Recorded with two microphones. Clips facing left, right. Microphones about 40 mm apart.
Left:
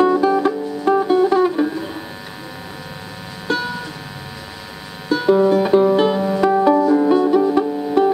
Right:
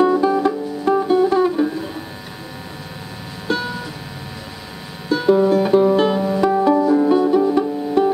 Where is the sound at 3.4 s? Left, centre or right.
Centre.